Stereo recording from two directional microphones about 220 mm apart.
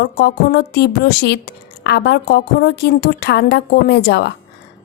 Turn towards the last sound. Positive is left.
turn(degrees=50)  # may be behind; listen again after turning